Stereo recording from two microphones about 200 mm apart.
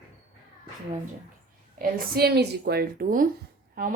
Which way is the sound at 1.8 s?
50° right (ahead or behind).